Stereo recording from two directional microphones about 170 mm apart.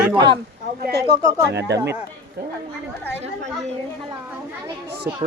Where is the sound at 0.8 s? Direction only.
70° right (ahead or behind).